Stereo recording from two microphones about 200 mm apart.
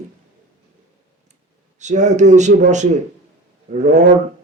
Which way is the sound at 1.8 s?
35° right (ahead or behind).